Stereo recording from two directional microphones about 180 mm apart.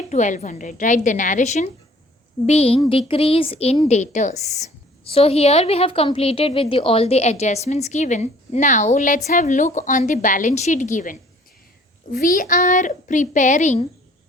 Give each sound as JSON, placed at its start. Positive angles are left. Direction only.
{"t": 0.1, "sound": "a woman's voice", "side_deg": 40}